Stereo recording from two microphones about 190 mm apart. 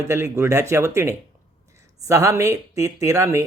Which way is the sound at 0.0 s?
15° right (ahead or behind).